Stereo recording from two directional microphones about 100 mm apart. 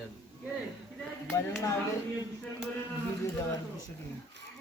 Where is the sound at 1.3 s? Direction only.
35° left (ahead or behind).